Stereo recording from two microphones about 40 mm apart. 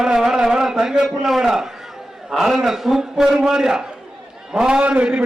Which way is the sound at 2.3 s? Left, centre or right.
Centre.